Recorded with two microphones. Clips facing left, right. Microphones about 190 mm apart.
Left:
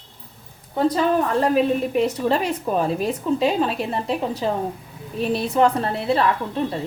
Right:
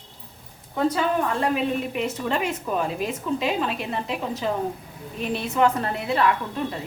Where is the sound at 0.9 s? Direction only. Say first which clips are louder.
Left 4 dB; 40° left (ahead or behind).